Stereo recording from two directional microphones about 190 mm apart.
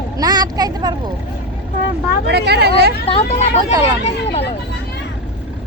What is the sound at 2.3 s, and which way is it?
Speech, 60° right (ahead or behind).